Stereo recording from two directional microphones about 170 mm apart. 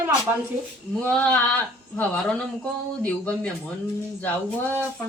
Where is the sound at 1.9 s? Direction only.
5° left (ahead or behind).